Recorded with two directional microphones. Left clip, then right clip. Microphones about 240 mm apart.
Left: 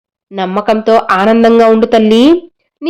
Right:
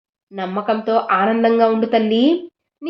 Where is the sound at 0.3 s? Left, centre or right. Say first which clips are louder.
Left 8 dB; left.